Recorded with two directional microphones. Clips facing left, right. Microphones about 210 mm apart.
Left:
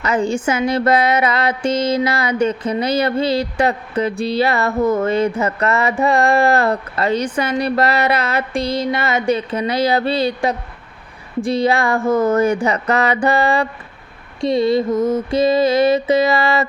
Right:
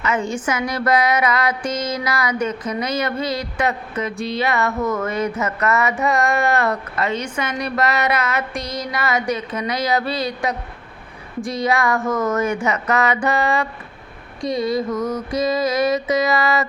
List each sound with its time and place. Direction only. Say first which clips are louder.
0.0 s speech: left 4 dB; 35° left (ahead or behind)
0.4 s music: left 5 dB; 25° left (ahead or behind)
5.4 s speech: left 2 dB; 30° left (ahead or behind)
14.4 s music: left 5 dB; 25° left (ahead or behind)